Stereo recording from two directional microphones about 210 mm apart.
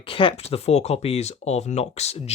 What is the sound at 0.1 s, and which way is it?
Speech, 25° left (ahead or behind).